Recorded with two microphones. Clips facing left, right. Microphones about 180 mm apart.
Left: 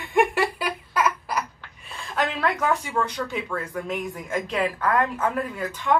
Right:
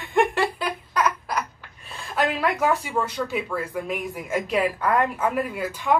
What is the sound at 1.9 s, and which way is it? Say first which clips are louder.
A woman's voice: right 2 dB; 10° right (ahead or behind).